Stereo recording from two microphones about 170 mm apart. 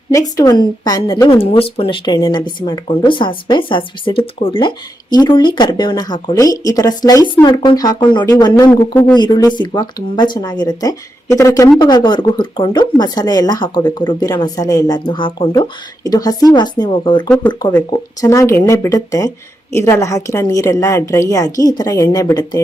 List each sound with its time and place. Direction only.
0.1 s speech: 20° left (ahead or behind)
17.2 s speech: 10° left (ahead or behind)